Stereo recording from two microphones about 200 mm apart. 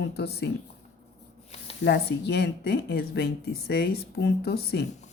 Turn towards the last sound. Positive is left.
turn(degrees=55)  # may be behind; listen again after turning